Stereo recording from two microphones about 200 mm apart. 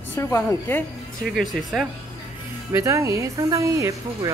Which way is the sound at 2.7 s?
15° right (ahead or behind).